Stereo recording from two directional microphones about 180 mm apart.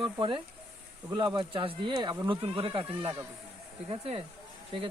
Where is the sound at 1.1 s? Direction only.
25° right (ahead or behind).